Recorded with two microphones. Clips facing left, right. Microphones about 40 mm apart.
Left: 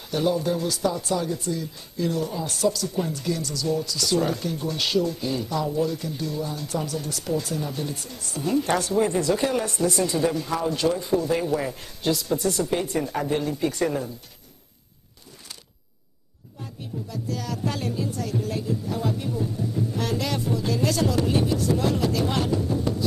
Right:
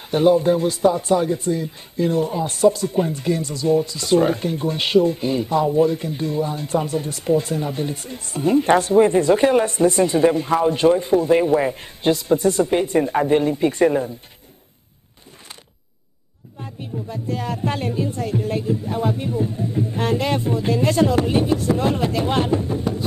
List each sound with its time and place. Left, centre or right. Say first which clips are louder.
0.1 s a man's voice: right 8 dB; right
16.6 s music: right 5 dB; right